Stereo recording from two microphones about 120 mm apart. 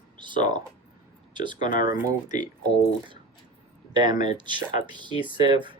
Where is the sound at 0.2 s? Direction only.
40° right (ahead or behind).